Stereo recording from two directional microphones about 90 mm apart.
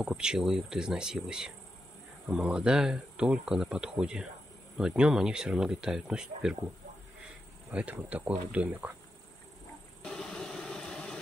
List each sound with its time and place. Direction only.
0.0 s speech: 10° right (ahead or behind)
7.7 s speech: 15° right (ahead or behind)
10.0 s vehicle: 10° left (ahead or behind)